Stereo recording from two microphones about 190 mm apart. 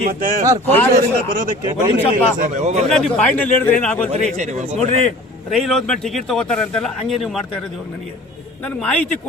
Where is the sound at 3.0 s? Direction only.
5° left (ahead or behind).